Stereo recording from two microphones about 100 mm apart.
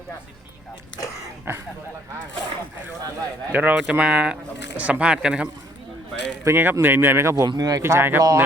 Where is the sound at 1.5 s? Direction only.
25° right (ahead or behind).